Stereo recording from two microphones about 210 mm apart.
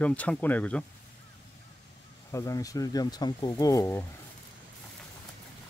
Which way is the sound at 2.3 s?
15° left (ahead or behind).